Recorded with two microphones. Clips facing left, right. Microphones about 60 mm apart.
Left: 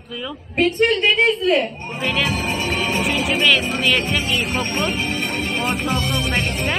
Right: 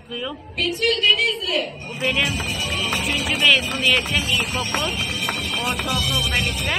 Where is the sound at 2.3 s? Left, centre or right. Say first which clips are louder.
Left 4 dB; left.